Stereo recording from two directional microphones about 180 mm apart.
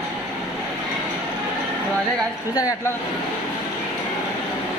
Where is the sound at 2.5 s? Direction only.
20° left (ahead or behind).